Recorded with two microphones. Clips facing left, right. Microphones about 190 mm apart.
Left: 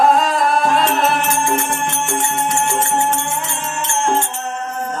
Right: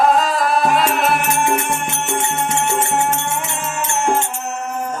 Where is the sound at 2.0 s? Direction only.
20° right (ahead or behind).